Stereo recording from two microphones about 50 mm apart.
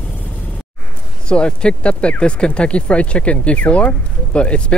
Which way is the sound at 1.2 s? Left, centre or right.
Centre.